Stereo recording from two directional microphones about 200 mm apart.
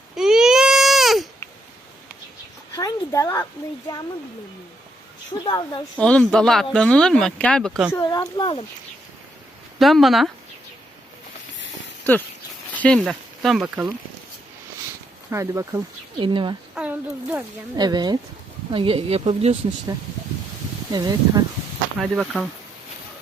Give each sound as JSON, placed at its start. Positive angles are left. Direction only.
{"t": 0.2, "sound": "baby cry", "side_deg": 0}
{"t": 2.7, "sound": "speech", "side_deg": 15}
{"t": 5.5, "sound": "speech", "side_deg": 20}
{"t": 6.0, "sound": "speech", "side_deg": 5}
{"t": 7.9, "sound": "speech", "side_deg": 15}
{"t": 9.7, "sound": "speech", "side_deg": 0}
{"t": 12.7, "sound": "speech", "side_deg": 5}
{"t": 15.3, "sound": "speech", "side_deg": -15}
{"t": 16.1, "sound": "speech", "side_deg": -25}
{"t": 16.7, "sound": "speech", "side_deg": -5}
{"t": 17.7, "sound": "speech", "side_deg": -20}
{"t": 20.9, "sound": "speech", "side_deg": -20}
{"t": 21.9, "sound": "speech", "side_deg": -5}